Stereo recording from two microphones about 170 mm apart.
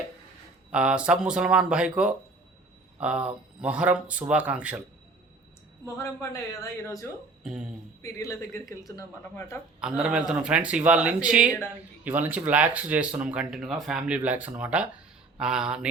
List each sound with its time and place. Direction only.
0.7 s speech: 5° right (ahead or behind)
5.8 s speech: 20° left (ahead or behind)
7.4 s speech: 5° right (ahead or behind)
8.0 s speech: 20° left (ahead or behind)
9.8 s speech: 5° right (ahead or behind)